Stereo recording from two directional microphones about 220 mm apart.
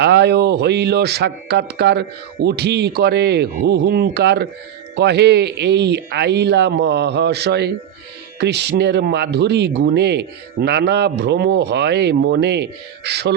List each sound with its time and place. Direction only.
0.0 s speech: 50° right (ahead or behind)